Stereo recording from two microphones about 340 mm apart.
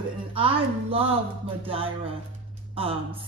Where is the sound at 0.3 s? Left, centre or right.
Centre.